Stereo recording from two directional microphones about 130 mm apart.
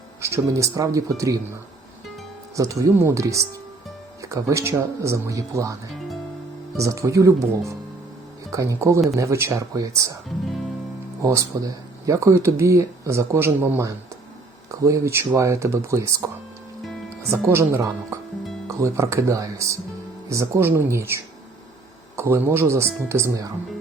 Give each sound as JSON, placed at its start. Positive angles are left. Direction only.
{"t": 0.2, "sound": "speech", "side_deg": -20}
{"t": 2.6, "sound": "speech", "side_deg": -25}
{"t": 6.7, "sound": "speech", "side_deg": -25}
{"t": 11.2, "sound": "speech", "side_deg": -25}
{"t": 17.3, "sound": "speech", "side_deg": -20}